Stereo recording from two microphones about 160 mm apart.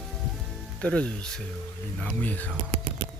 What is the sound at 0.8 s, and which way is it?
Speech, 5° left (ahead or behind).